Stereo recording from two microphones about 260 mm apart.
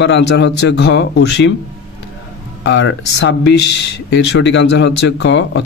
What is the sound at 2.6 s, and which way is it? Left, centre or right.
Speech, left.